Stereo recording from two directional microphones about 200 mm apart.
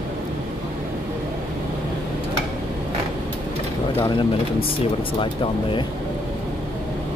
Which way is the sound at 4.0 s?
25° left (ahead or behind).